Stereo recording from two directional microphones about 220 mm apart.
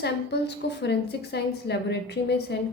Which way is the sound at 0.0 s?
50° left (ahead or behind).